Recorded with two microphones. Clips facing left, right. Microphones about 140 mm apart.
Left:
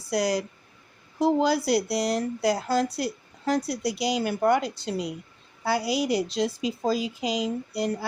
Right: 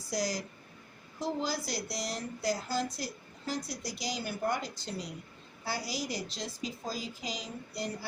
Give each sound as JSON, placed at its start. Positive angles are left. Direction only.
{"t": 0.1, "sound": "a woman's voice", "side_deg": 65}